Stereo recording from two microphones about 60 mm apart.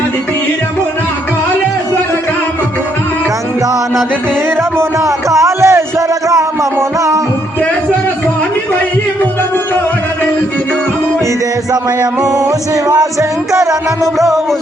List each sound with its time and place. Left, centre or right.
4.8 s a sound: right
12.2 s music: right
14.0 s music: centre